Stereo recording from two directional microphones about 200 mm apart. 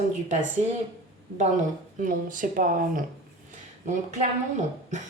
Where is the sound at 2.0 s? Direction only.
40° right (ahead or behind).